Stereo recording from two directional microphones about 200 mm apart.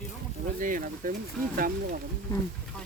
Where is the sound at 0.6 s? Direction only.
40° right (ahead or behind).